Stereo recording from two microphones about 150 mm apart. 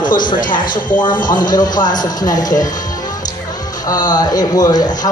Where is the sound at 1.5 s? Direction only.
25° left (ahead or behind).